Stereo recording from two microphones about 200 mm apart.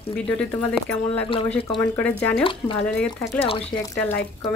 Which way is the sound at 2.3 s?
25° left (ahead or behind).